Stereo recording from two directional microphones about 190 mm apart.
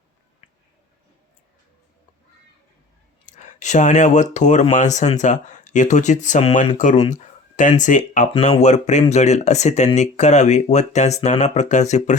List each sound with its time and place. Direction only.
3.2 s speech: 40° left (ahead or behind)